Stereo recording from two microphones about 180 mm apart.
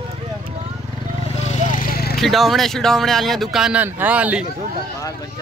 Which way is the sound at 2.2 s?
Centre (ahead or behind).